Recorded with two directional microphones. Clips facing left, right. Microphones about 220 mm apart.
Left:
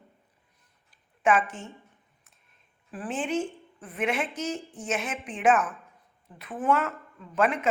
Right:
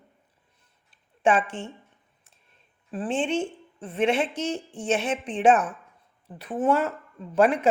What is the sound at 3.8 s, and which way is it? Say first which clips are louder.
A woman's voice: right 5 dB; 30° right (ahead or behind).